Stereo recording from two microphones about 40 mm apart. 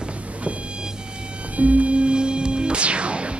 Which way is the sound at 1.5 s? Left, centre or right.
Right.